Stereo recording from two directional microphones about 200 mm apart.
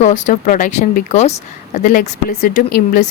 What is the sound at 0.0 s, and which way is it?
Speech, 40° left (ahead or behind).